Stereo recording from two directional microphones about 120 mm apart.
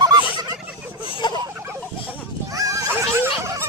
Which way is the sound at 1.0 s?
45° left (ahead or behind).